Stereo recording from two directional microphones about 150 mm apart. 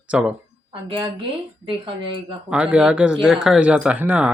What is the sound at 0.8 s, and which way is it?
Speech, 35° right (ahead or behind).